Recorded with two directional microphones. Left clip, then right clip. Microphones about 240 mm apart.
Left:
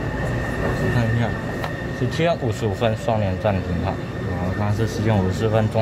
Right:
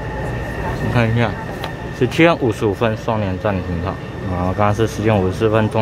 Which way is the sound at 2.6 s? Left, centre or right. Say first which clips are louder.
Right 4 dB; centre.